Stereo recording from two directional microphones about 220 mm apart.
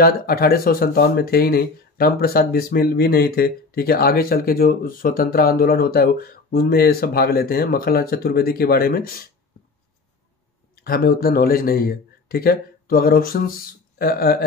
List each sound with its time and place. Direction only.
0.0 s speech: 40° left (ahead or behind)
10.8 s speech: 45° left (ahead or behind)